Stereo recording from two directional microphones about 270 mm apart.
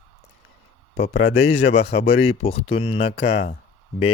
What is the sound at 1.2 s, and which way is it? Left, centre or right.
Speech, left.